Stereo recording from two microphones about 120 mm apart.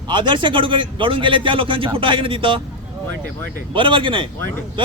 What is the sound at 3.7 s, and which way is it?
Speech, 45° right (ahead or behind).